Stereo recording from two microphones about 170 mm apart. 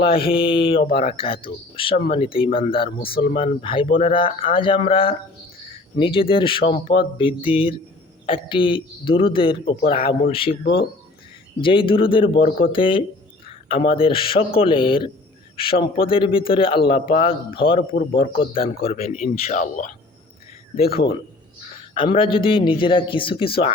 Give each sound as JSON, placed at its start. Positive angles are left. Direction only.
{"t": 0.0, "sound": "speech", "side_deg": 30}
{"t": 11.6, "sound": "speech", "side_deg": 30}
{"t": 20.8, "sound": "a man's voice", "side_deg": 65}
{"t": 21.9, "sound": "speech", "side_deg": 30}